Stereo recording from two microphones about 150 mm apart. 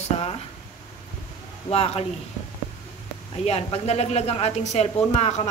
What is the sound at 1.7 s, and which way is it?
Speech, 45° left (ahead or behind).